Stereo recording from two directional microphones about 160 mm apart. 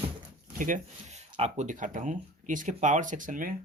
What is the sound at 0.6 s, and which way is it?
Speech, 50° right (ahead or behind).